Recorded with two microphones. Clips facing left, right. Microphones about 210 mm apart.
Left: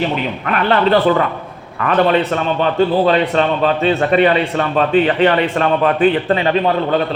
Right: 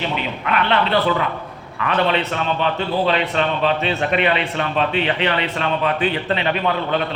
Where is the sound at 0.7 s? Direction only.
45° left (ahead or behind).